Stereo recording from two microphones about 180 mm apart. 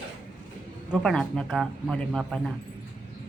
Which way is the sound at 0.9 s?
5° left (ahead or behind).